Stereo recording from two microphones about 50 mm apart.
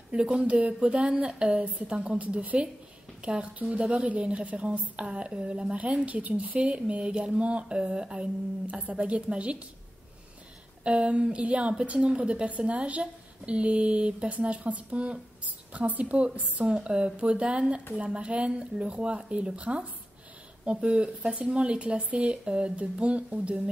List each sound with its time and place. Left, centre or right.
0.1 s a woman's voice: right
10.8 s speech: right
16.7 s speech: centre